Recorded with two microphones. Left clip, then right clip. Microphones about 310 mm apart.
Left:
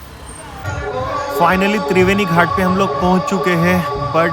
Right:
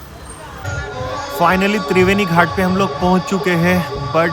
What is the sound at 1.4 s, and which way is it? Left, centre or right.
A man's voice, centre.